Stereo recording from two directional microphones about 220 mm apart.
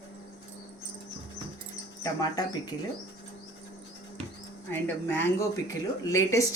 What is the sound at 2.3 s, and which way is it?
Speech, 20° left (ahead or behind).